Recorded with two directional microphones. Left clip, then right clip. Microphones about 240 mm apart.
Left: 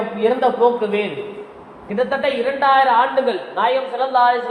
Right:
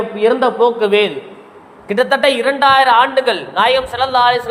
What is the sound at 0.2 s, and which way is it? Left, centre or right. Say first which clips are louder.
A man's voice: right 3 dB; right.